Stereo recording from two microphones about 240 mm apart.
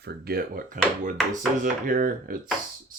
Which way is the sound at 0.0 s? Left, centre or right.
Right.